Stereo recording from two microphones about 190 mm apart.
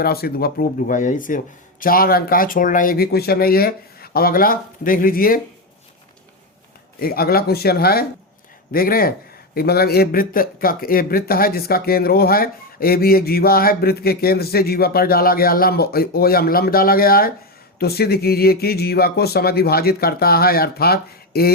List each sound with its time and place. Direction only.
0.0 s speech: 55° left (ahead or behind)
7.0 s speech: 50° left (ahead or behind)